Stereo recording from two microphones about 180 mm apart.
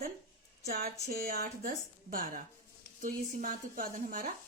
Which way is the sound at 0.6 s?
55° right (ahead or behind).